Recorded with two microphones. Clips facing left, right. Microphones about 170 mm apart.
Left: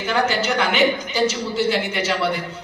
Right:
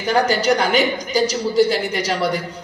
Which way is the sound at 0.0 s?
40° right (ahead or behind).